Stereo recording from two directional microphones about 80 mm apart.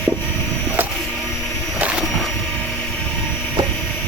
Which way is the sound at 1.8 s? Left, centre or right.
Centre.